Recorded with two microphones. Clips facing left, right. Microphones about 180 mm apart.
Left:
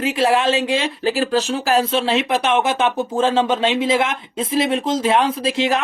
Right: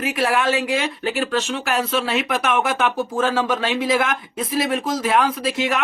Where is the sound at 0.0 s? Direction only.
25° left (ahead or behind).